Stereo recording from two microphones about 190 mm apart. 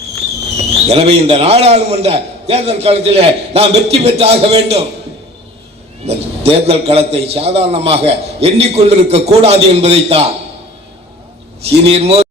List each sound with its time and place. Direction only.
0.9 s a man's voice: 35° right (ahead or behind)
6.1 s a man's voice: 30° right (ahead or behind)
11.9 s a man's voice: 30° right (ahead or behind)